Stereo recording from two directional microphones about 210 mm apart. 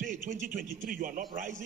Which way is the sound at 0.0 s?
40° right (ahead or behind).